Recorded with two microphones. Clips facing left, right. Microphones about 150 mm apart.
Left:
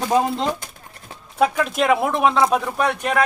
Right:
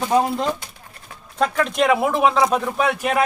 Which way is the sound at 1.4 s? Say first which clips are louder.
Even; centre (ahead or behind).